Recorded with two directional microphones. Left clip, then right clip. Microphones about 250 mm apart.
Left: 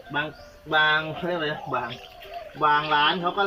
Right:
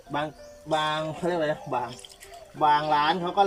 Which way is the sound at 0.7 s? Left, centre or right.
Right.